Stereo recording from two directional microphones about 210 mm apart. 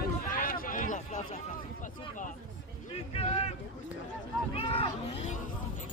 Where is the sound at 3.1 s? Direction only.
30° left (ahead or behind).